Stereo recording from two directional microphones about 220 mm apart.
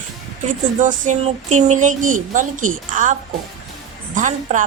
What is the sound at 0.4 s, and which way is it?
Speech, 35° right (ahead or behind).